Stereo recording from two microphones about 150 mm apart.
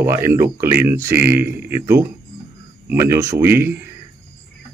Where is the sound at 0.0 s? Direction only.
15° right (ahead or behind).